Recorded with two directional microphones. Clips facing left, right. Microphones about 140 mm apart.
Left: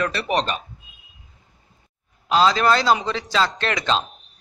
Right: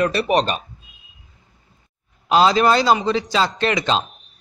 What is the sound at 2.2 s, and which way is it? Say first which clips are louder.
Speech: right 2 dB; 15° right (ahead or behind).